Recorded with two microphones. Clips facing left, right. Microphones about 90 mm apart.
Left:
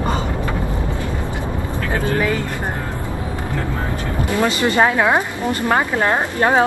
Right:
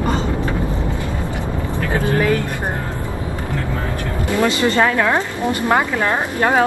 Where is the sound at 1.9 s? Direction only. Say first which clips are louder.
Right 1 dB; 20° right (ahead or behind).